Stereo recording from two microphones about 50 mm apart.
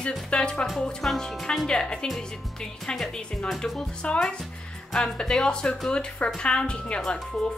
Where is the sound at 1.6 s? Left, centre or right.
Centre.